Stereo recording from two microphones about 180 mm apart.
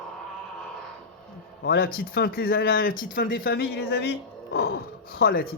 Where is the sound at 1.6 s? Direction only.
55° left (ahead or behind).